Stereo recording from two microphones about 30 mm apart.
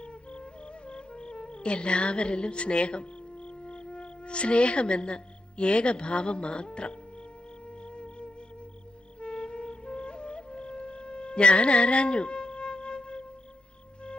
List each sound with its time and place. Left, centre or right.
0.0 s music: left
9.2 s flute: left